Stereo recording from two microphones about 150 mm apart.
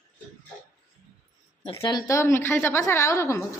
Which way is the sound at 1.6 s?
35° left (ahead or behind).